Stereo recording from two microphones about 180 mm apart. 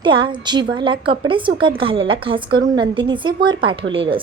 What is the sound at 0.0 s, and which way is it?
A woman's voice, 25° right (ahead or behind).